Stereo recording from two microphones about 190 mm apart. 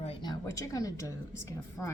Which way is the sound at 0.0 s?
25° left (ahead or behind).